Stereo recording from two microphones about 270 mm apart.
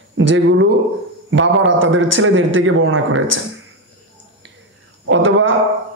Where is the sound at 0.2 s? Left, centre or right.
Right.